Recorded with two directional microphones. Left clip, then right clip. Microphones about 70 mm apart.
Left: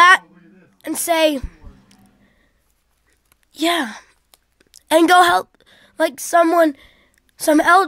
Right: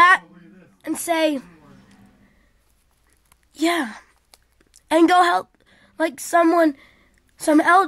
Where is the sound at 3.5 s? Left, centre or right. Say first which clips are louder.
Left 2 dB; left.